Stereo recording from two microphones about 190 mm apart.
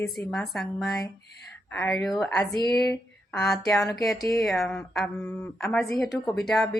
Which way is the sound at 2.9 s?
5° left (ahead or behind).